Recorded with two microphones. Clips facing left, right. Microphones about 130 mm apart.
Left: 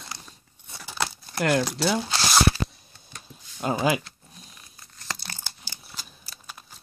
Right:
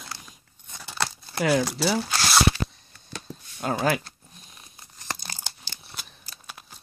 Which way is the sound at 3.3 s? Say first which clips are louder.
Right 9 dB; 90° right.